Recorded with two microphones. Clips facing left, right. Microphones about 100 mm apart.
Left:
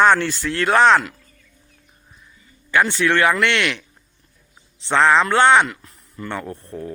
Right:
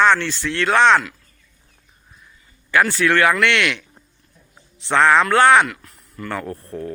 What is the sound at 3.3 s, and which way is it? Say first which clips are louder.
Speech: right 1 dB; 30° left (ahead or behind).